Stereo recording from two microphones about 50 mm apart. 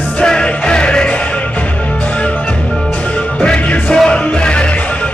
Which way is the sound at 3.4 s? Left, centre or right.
Left.